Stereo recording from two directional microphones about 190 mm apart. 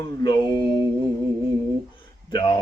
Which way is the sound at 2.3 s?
25° left (ahead or behind).